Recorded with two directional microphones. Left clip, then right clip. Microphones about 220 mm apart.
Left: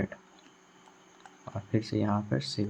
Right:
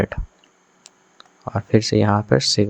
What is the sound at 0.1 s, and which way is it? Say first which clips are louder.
Speech: right 14 dB; 40° right (ahead or behind).